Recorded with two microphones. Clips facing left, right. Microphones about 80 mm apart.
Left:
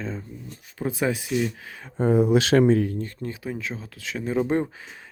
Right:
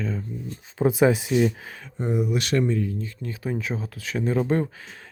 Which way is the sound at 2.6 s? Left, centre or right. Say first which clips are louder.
Left 5 dB; left.